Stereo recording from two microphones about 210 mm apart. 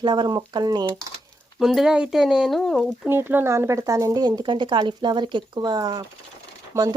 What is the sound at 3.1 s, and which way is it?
Speech, 10° right (ahead or behind).